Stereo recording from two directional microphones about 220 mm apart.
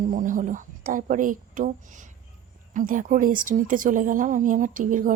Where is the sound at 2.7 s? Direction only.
35° right (ahead or behind).